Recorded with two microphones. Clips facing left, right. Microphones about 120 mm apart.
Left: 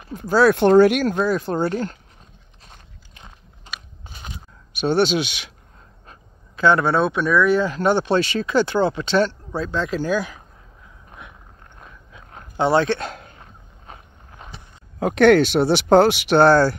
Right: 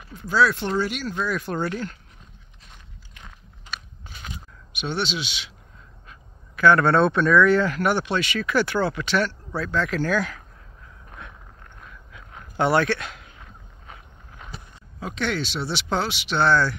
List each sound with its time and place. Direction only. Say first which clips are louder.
0.3 s speech: left 8 dB; 50° left (ahead or behind)
1.2 s speech: left 6 dB; 30° left (ahead or behind)
2.7 s biting: left 1 dB; 30° left (ahead or behind)
4.0 s a sound: left 1 dB; 25° left (ahead or behind)
4.7 s speech: left 9 dB; 40° left (ahead or behind)
6.5 s a man's voice: even; 20° left (ahead or behind)
6.8 s speech: right 1 dB; 5° left (ahead or behind)
11.1 s a sound: even; 15° left (ahead or behind)
11.8 s a sound: left 2 dB; 25° left (ahead or behind)
12.5 s speech: left 3 dB; 20° left (ahead or behind)
13.0 s hiccup: left 7 dB; 40° left (ahead or behind)
15.0 s speech: left 14 dB; 55° left (ahead or behind)